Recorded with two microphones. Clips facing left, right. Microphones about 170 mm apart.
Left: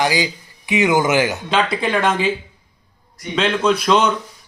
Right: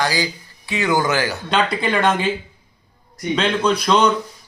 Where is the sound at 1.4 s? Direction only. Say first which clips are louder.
Left 1 dB; centre (ahead or behind).